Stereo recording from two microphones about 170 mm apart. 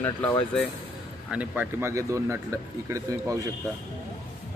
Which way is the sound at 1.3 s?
10° right (ahead or behind).